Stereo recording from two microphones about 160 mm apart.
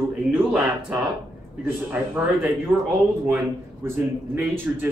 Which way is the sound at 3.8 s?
15° right (ahead or behind).